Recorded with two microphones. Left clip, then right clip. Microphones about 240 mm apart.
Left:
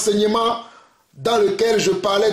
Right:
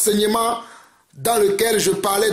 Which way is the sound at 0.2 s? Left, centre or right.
Right.